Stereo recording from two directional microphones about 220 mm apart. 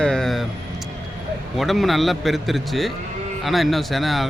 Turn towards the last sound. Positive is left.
turn(degrees=0)  # may be behind; listen again after turning